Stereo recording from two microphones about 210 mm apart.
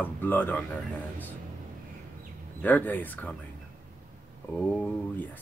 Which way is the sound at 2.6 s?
10° left (ahead or behind).